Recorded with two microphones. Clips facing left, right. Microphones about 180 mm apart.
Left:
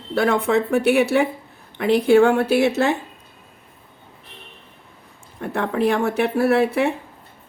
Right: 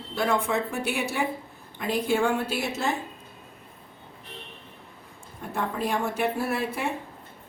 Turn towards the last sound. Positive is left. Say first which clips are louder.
# left 11 dB
turn(degrees=70)  # may be behind; listen again after turning